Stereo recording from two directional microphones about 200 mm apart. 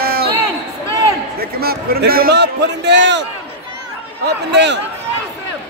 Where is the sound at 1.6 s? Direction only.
50° right (ahead or behind).